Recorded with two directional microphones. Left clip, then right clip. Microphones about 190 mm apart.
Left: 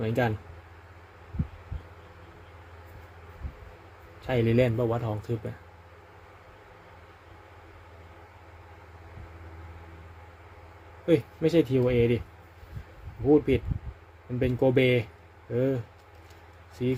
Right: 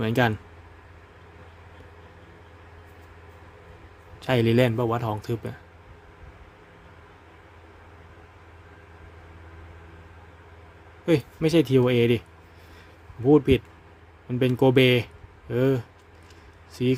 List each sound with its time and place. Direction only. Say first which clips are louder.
0.0 s speech: right 4 dB; 35° right (ahead or behind)
4.3 s a man's voice: right 3 dB; 35° right (ahead or behind)
11.0 s a man's voice: right 1 dB; 30° right (ahead or behind)
13.3 s speech: right 3 dB; 30° right (ahead or behind)
16.8 s speech: right 5 dB; 30° right (ahead or behind)